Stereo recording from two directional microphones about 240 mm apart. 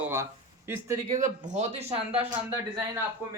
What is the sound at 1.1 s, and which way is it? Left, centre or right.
Speech, right.